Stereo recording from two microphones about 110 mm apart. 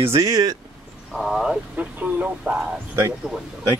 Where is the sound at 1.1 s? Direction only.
Centre (ahead or behind).